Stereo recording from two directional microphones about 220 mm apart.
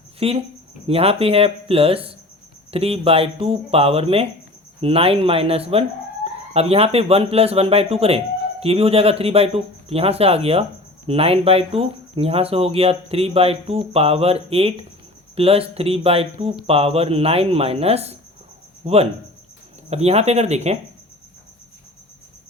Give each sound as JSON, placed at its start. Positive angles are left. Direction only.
{"t": 0.2, "sound": "speech", "side_deg": -25}